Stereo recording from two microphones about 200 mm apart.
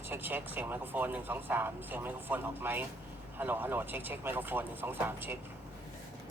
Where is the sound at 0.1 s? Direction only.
10° right (ahead or behind).